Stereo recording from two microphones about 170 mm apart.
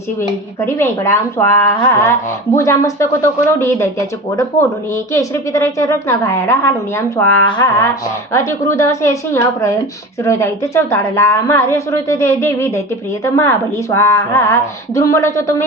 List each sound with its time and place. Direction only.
0.2 s speech: 15° left (ahead or behind)
7.4 s a sound: 25° left (ahead or behind)
8.3 s speech: 15° left (ahead or behind)